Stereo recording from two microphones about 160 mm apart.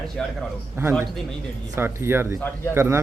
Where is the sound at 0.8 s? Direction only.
15° right (ahead or behind).